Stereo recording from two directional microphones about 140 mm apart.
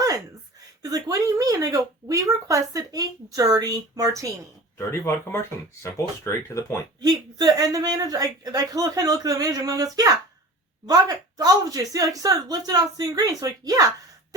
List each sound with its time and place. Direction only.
0.8 s speech: 25° right (ahead or behind)
4.8 s speech: 20° left (ahead or behind)
7.0 s speech: 30° right (ahead or behind)